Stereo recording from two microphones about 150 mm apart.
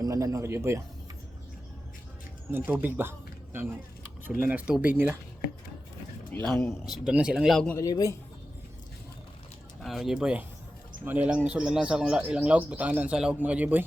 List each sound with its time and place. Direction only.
0.0 s speech: 25° right (ahead or behind)
2.5 s speech: 15° right (ahead or behind)
6.3 s speech: 10° left (ahead or behind)
7.0 s speech: 5° right (ahead or behind)
7.8 s a man's voice: 25° left (ahead or behind)
9.8 s speech: centre (ahead or behind)